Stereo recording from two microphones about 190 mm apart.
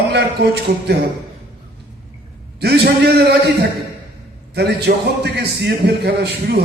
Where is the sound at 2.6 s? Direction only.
55° right (ahead or behind).